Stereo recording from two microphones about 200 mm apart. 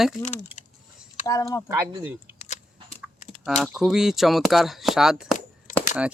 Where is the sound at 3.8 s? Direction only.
Centre (ahead or behind).